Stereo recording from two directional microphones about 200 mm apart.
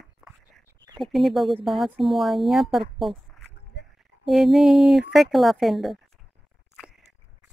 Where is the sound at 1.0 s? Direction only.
Centre (ahead or behind).